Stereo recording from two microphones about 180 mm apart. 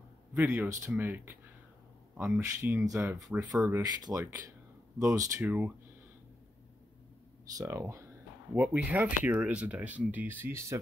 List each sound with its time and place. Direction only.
0.3 s speech: 10° right (ahead or behind)
7.5 s speech: 15° right (ahead or behind)